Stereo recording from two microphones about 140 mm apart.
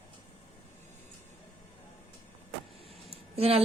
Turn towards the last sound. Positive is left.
turn(degrees=-45)  # may be behind; listen again after turning